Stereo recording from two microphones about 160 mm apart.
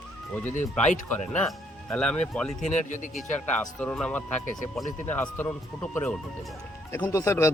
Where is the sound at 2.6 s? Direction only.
50° left (ahead or behind).